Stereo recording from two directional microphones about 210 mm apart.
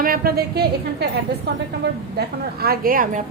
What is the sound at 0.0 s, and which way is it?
A woman's voice, 45° right (ahead or behind).